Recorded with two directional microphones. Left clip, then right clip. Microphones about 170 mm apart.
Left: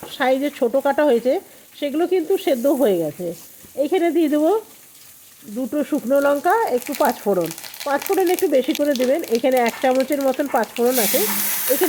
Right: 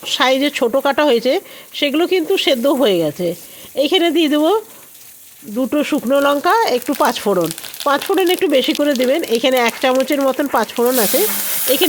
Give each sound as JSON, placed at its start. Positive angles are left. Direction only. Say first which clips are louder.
{"t": 0.0, "sound": "speech", "louder": "right 5 dB", "side_deg": -20}
{"t": 5.5, "sound": "speech", "louder": "right 5 dB", "side_deg": -15}